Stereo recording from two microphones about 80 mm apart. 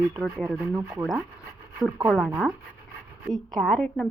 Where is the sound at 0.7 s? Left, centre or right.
Right.